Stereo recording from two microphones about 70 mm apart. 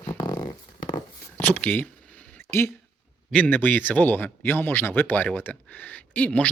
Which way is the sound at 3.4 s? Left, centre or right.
Left.